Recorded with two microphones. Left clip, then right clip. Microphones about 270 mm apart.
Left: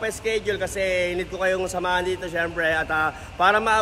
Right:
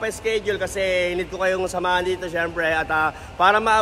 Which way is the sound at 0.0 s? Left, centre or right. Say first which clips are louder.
Right 2 dB; centre.